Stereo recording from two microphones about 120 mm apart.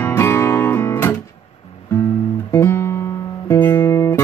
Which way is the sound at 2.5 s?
20° left (ahead or behind).